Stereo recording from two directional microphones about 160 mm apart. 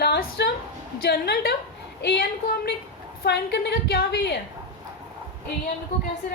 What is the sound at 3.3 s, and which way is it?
A woman's voice, 90° left.